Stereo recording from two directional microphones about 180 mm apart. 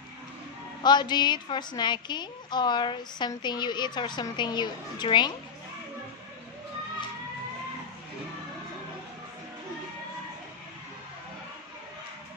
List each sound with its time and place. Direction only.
0.8 s a woman's voice: 25° left (ahead or behind)